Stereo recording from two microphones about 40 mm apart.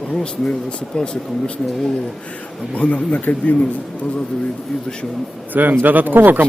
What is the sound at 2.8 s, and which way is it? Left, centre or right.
Speech, left.